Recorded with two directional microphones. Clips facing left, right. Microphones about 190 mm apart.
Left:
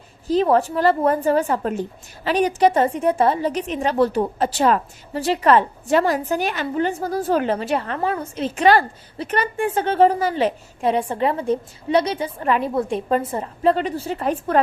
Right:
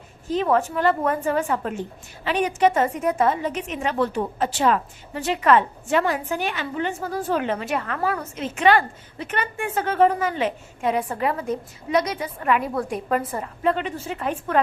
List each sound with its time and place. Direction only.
0.3 s a woman's voice: 35° left (ahead or behind)